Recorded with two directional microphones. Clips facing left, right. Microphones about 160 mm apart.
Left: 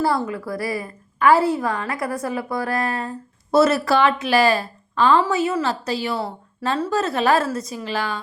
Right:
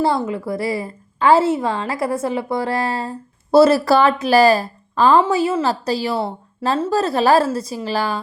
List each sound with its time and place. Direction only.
0.0 s a woman's voice: 25° right (ahead or behind)